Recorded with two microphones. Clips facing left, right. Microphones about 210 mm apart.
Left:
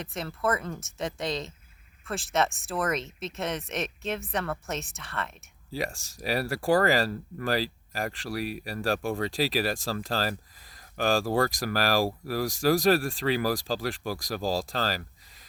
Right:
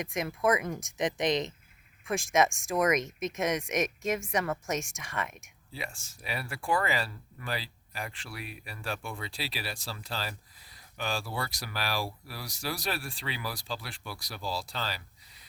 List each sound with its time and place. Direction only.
0.0 s speech: 15° right (ahead or behind)
5.7 s speech: 40° left (ahead or behind)
6.0 s speech: 90° left
6.2 s speech: 40° left (ahead or behind)